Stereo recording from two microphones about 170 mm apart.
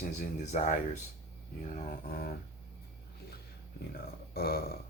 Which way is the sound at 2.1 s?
65° left (ahead or behind).